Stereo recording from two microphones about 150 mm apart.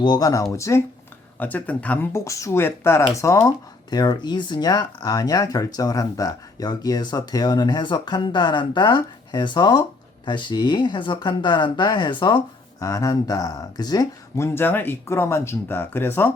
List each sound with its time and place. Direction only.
0.0 s speech: 25° left (ahead or behind)